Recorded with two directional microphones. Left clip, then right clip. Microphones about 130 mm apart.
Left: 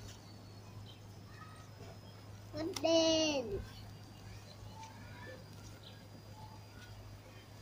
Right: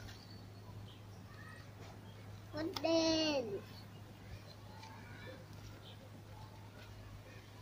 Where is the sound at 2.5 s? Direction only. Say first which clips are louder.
Left 3 dB; 20° left (ahead or behind).